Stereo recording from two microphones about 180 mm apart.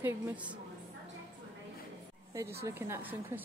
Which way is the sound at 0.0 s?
5° right (ahead or behind).